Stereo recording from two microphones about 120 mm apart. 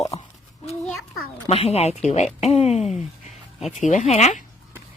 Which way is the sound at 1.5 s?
60° left (ahead or behind).